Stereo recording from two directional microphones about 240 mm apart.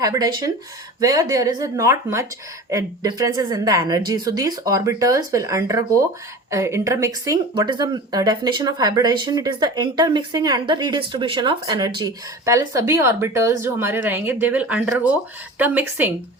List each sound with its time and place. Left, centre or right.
0.0 s speech: centre